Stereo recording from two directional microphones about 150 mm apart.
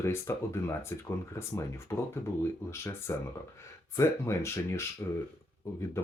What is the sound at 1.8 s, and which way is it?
Speech, 15° left (ahead or behind).